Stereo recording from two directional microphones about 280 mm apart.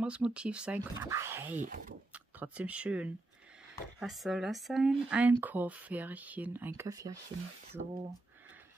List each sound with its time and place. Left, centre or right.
0.0 s speech: centre
1.6 s speech: right
2.1 s speech: centre